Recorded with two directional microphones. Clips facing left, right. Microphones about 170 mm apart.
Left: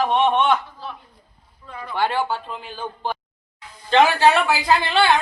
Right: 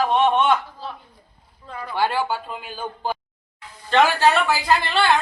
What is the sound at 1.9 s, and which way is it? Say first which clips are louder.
Speech: even; 5° right (ahead or behind).